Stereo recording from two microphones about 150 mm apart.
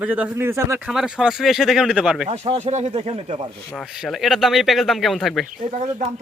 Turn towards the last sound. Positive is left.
turn(degrees=-50)  # may be behind; listen again after turning